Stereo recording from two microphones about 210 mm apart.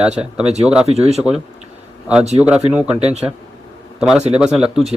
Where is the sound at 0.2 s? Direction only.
5° right (ahead or behind).